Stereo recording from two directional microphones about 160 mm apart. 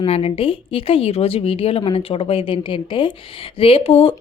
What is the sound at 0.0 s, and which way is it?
Speech, 40° left (ahead or behind).